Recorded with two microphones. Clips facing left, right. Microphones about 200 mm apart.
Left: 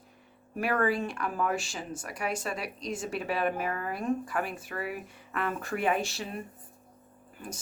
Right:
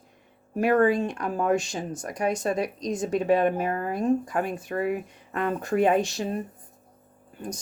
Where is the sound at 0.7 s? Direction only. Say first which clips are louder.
Right 7 dB; 20° right (ahead or behind).